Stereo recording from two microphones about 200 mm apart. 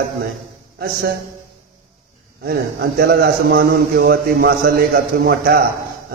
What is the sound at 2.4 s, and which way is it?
A man's voice, 50° right (ahead or behind).